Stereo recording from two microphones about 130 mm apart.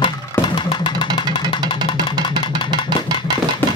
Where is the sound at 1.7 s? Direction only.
35° left (ahead or behind).